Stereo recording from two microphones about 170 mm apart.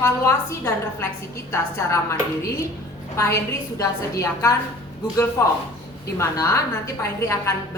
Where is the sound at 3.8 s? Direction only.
20° left (ahead or behind).